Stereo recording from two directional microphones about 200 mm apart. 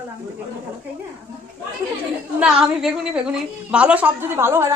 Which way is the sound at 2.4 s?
5° right (ahead or behind).